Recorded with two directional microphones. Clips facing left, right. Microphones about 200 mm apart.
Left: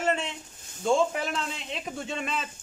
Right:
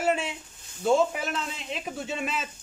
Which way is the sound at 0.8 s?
5° right (ahead or behind).